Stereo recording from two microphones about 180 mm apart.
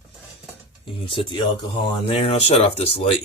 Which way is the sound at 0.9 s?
30° left (ahead or behind).